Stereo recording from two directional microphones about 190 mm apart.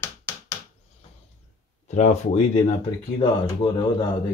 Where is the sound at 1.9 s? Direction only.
40° left (ahead or behind).